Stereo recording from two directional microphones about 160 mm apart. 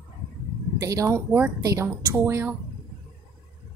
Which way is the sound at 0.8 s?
20° right (ahead or behind).